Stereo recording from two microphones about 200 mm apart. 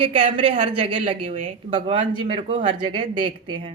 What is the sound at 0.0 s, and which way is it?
A woman's voice, 25° right (ahead or behind).